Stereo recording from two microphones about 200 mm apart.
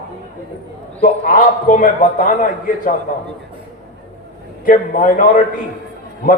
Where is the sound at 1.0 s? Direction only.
45° left (ahead or behind).